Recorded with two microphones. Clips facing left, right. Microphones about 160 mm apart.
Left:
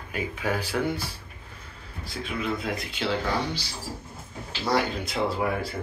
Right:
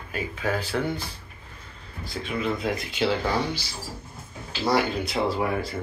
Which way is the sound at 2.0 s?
Centre (ahead or behind).